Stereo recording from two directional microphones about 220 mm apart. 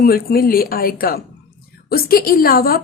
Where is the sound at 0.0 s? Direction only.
45° left (ahead or behind).